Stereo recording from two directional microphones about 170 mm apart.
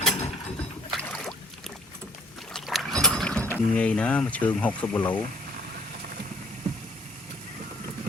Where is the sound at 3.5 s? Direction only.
10° left (ahead or behind).